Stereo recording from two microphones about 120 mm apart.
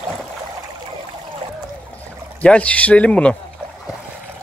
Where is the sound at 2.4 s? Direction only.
10° left (ahead or behind).